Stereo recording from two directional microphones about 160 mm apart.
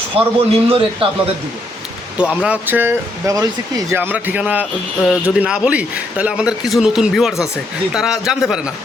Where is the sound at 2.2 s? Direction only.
5° right (ahead or behind).